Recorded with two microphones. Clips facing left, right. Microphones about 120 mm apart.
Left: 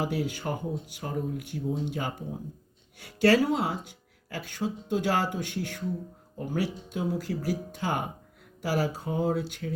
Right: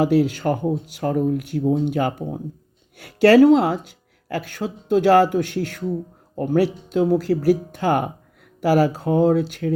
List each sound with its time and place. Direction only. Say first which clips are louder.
0.0 s speech: right 12 dB; 75° right (ahead or behind)